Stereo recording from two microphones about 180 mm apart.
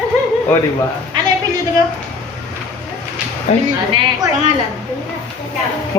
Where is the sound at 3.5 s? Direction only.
40° left (ahead or behind).